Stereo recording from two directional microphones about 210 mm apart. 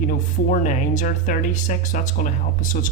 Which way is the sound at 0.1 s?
40° left (ahead or behind).